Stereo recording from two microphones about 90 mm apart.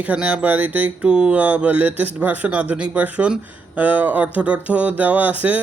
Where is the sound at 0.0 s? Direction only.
15° right (ahead or behind).